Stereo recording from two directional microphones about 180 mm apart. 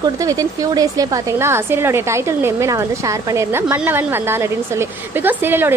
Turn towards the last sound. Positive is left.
turn(degrees=-10)  # may be behind; listen again after turning